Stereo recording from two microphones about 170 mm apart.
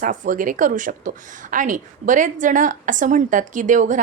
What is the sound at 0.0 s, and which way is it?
Speech, 50° right (ahead or behind).